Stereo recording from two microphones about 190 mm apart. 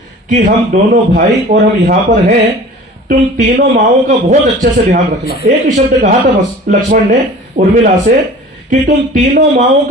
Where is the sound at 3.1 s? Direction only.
45° right (ahead or behind).